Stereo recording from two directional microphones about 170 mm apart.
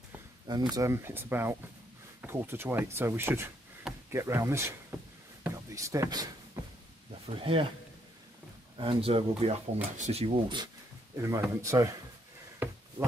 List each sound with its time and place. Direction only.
0.5 s speech: 25° right (ahead or behind)
4.1 s a sound: 15° right (ahead or behind)
7.2 s speech: 30° right (ahead or behind)
8.7 s speech: 30° right (ahead or behind)
11.2 s speech: 15° right (ahead or behind)
12.6 s a sound: 10° right (ahead or behind)